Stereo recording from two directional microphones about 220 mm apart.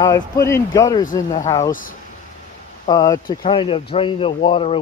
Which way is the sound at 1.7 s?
40° left (ahead or behind).